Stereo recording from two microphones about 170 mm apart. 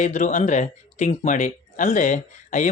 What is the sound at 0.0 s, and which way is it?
Speech, 45° left (ahead or behind).